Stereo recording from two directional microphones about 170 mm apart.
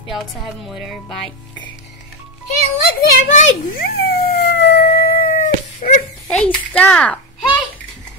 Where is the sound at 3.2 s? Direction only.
50° left (ahead or behind).